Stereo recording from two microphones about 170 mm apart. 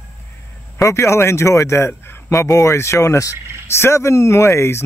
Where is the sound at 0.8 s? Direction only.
15° left (ahead or behind).